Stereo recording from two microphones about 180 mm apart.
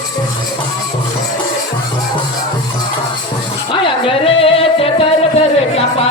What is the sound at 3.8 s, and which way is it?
Music, 30° left (ahead or behind).